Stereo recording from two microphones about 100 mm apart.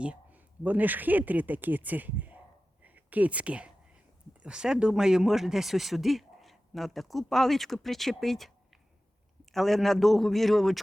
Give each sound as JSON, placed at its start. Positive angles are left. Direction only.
{"t": 0.0, "sound": "speech", "side_deg": -15}